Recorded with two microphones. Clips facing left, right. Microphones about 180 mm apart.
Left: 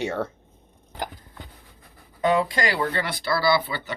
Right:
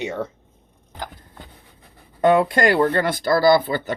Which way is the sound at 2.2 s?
55° right (ahead or behind).